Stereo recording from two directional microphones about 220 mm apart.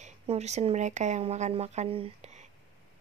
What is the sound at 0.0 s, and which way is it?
Speech, 30° right (ahead or behind).